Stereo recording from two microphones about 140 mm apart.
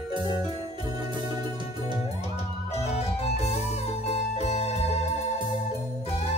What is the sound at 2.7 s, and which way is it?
Music, 50° left (ahead or behind).